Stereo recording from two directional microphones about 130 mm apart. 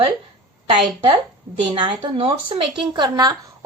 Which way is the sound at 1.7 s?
40° right (ahead or behind).